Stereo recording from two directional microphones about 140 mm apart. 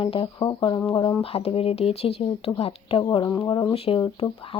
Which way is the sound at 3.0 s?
25° left (ahead or behind).